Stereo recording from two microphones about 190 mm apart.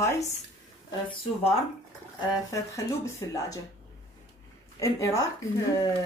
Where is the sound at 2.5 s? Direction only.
15° left (ahead or behind).